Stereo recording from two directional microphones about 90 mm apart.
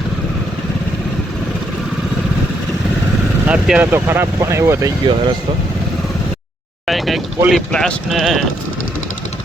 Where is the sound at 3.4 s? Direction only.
15° right (ahead or behind); by 4.9 s 30° right (ahead or behind).